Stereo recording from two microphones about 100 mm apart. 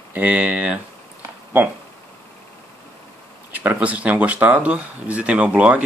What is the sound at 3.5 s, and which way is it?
Speech, 15° right (ahead or behind).